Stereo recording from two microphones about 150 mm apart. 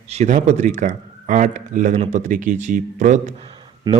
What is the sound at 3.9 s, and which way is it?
Speech, 30° right (ahead or behind).